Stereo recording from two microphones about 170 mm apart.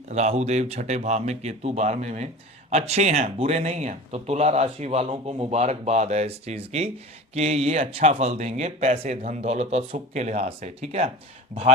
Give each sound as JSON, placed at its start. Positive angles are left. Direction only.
{"t": 0.1, "sound": "speech", "side_deg": -40}